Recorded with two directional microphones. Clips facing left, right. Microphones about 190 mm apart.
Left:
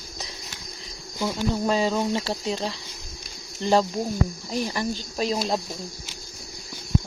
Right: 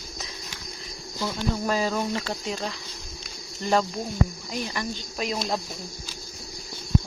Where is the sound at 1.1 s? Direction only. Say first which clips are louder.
Left 3 dB; 20° left (ahead or behind).